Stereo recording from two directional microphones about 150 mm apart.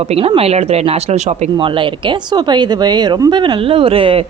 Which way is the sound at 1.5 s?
35° right (ahead or behind).